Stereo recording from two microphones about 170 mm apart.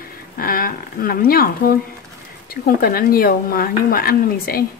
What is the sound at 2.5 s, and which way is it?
A woman's voice, 60° left (ahead or behind).